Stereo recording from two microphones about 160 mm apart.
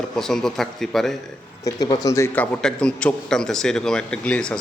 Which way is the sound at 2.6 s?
5° left (ahead or behind).